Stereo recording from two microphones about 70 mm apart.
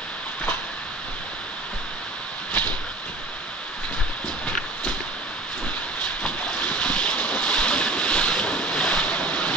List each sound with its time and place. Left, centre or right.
6.2 s boat: centre